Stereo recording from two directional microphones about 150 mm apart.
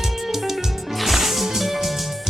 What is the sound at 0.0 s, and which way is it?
Music, centre (ahead or behind).